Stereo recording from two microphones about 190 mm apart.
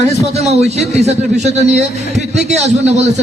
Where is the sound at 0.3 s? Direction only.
35° right (ahead or behind).